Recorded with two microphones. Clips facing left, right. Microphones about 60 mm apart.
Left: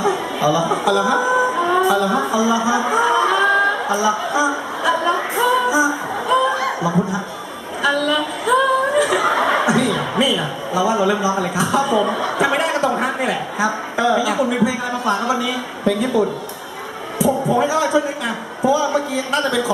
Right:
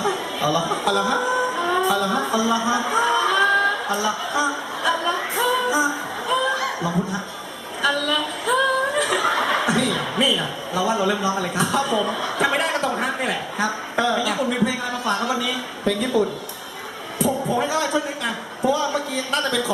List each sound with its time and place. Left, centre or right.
0.0 s a sound: centre
6.8 s a man's voice: centre
12.0 s a man's voice: centre
12.4 s a man's voice: centre